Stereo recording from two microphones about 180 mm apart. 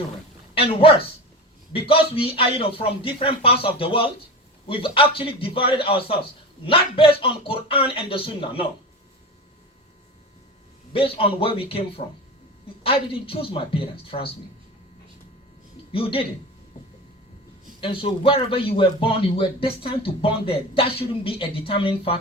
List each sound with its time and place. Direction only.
0.5 s a man's voice: 30° left (ahead or behind)
10.9 s a man's voice: 30° left (ahead or behind)
15.9 s a man's voice: 30° left (ahead or behind)
17.7 s speech: 30° left (ahead or behind)